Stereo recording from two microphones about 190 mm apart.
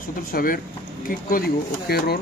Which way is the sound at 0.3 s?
50° left (ahead or behind).